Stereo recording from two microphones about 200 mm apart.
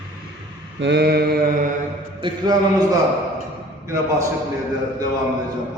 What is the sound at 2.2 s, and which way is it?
Speech, 25° right (ahead or behind).